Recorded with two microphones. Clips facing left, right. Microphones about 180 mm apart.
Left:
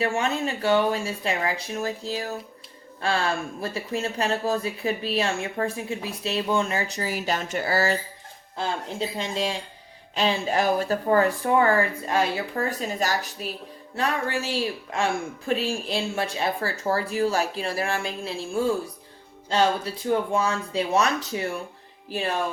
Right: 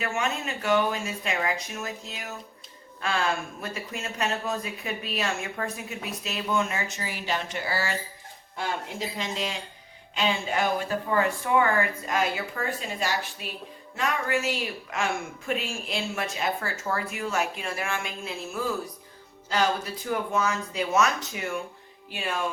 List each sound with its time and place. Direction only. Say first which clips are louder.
0.0 s speech: left 5 dB; 30° left (ahead or behind)
9.0 s speech: left 4 dB; 30° left (ahead or behind)